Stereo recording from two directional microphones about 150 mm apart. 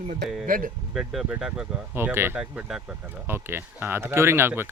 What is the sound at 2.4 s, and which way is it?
Speech, 5° right (ahead or behind).